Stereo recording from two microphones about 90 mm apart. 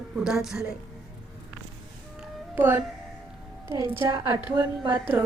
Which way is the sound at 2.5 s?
25° right (ahead or behind).